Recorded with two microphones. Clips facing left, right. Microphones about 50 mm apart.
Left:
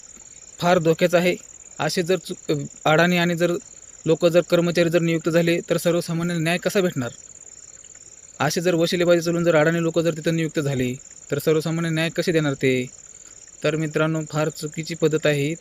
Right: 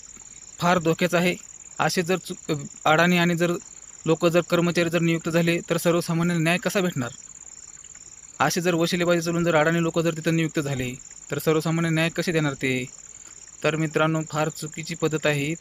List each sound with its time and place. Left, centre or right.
0.5 s speech: centre
1.8 s speech: right
5.7 s speech: right
8.4 s speech: right
13.6 s speech: right